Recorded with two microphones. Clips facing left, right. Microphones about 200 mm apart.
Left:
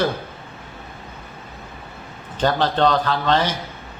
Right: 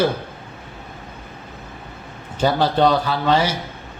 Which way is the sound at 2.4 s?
10° right (ahead or behind).